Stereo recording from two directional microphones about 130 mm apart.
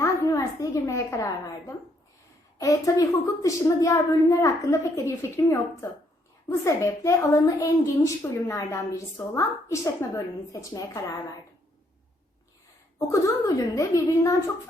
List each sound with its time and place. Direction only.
0.0 s a woman's voice: 25° left (ahead or behind)
13.1 s a woman's voice: 25° left (ahead or behind)